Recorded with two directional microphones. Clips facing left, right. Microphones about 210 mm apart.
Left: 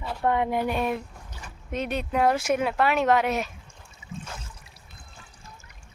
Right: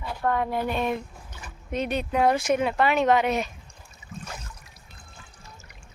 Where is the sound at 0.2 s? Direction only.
20° left (ahead or behind); by 3.5 s centre (ahead or behind).